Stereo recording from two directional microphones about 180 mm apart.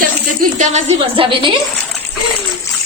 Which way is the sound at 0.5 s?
40° right (ahead or behind).